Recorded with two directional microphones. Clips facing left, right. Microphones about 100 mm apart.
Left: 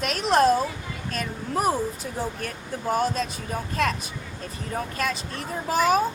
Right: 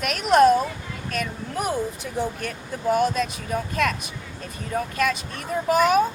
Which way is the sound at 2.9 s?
35° left (ahead or behind).